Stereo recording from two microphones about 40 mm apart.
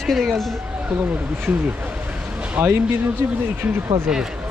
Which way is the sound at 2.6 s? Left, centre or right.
Right.